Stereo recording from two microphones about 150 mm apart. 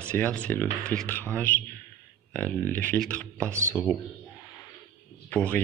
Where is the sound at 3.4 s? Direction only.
20° right (ahead or behind).